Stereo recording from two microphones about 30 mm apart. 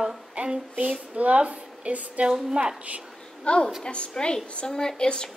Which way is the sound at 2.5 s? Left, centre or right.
Right.